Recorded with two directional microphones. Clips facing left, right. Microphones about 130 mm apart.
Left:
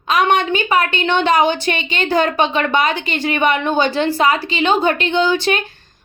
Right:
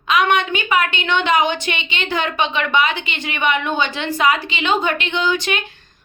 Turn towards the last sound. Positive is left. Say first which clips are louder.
# left 4 dB
turn(degrees=35)  # may be behind; listen again after turning